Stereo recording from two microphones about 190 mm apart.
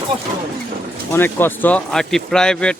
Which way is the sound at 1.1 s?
10° left (ahead or behind).